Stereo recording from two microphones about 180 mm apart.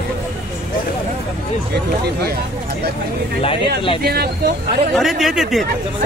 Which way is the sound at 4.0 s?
60° right (ahead or behind).